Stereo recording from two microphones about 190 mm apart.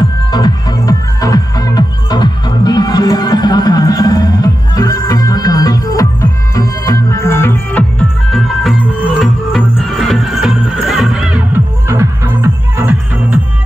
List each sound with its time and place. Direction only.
0.3 s music: 20° left (ahead or behind); by 13.4 s 10° right (ahead or behind)